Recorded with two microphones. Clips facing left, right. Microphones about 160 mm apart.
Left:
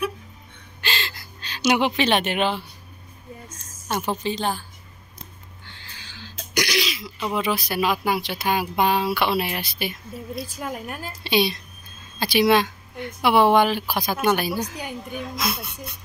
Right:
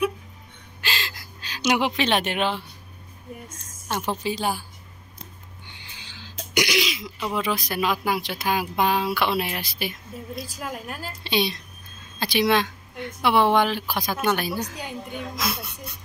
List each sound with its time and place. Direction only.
0.7 s gasp: centre (ahead or behind)
1.6 s speech: centre (ahead or behind)
5.7 s cough: 15° right (ahead or behind)
7.2 s speech: 5° left (ahead or behind)
10.6 s a woman's voice: 20° left (ahead or behind)